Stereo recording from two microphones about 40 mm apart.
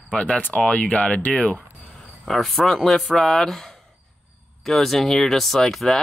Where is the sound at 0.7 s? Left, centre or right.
Left.